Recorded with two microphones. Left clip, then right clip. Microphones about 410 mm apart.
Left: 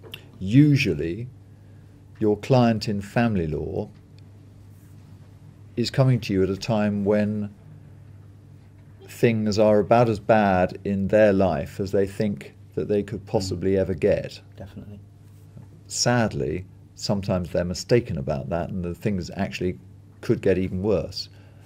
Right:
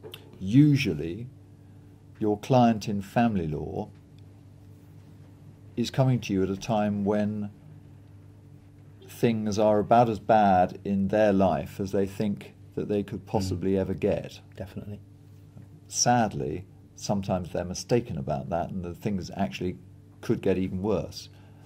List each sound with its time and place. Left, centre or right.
0.1 s speech: centre
5.8 s speech: centre
9.0 s speech: centre
14.6 s speech: right
15.9 s speech: centre